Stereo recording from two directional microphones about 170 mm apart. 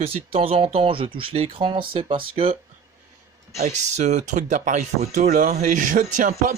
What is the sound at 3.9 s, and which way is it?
Speech, 40° right (ahead or behind).